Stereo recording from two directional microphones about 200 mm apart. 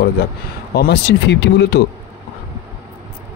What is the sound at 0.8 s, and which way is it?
Speech, 60° left (ahead or behind).